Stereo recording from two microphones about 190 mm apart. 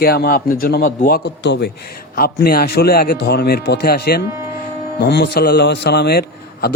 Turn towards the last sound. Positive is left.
turn(degrees=55)  # may be behind; listen again after turning